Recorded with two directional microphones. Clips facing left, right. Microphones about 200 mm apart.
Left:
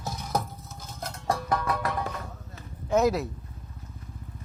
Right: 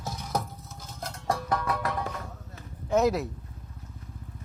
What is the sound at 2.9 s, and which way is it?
Speech, 5° left (ahead or behind).